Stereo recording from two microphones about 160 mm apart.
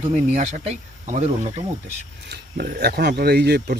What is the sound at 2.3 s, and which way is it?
Speech, 65° right (ahead or behind).